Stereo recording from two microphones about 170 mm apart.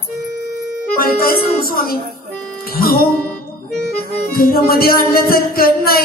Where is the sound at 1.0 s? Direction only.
60° left (ahead or behind).